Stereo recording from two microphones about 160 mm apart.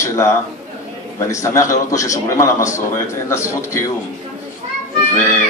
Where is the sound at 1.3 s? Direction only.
20° left (ahead or behind).